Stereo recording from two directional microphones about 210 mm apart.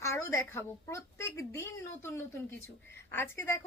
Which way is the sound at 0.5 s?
15° left (ahead or behind).